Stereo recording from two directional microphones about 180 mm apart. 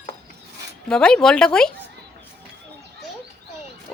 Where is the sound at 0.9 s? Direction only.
5° left (ahead or behind).